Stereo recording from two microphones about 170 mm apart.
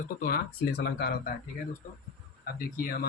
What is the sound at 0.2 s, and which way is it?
Speech, 60° left (ahead or behind).